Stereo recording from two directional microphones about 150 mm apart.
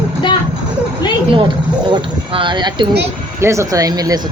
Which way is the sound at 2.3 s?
30° right (ahead or behind).